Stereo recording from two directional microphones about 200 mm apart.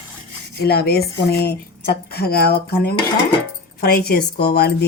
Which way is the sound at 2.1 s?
50° left (ahead or behind).